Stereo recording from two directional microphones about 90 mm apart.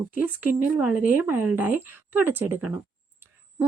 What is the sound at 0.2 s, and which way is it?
Speech, 20° right (ahead or behind).